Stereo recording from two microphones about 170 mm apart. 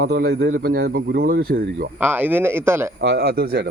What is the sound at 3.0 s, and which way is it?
Speech, 80° right.